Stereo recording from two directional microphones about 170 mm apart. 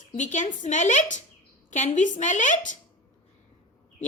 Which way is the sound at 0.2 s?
45° left (ahead or behind).